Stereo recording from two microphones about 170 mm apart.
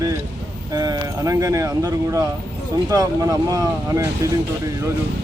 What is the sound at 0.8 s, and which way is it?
Speech, 20° right (ahead or behind).